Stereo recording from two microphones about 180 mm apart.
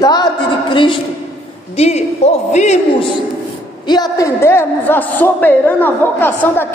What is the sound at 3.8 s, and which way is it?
A man's voice, 25° left (ahead or behind).